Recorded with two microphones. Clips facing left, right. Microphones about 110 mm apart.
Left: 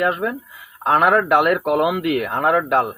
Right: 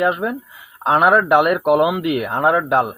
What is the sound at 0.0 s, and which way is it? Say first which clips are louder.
A man's voice: right 2 dB; 20° right (ahead or behind).